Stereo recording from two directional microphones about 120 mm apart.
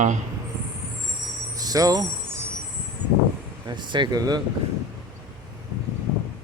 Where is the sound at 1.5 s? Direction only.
30° right (ahead or behind).